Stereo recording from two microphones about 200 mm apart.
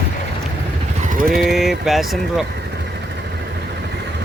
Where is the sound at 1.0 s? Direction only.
40° right (ahead or behind).